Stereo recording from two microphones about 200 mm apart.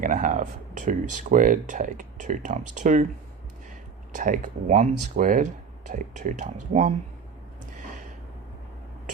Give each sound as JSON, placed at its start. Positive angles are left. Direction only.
{"t": 0.0, "sound": "speech", "side_deg": -40}
{"t": 4.1, "sound": "speech", "side_deg": -40}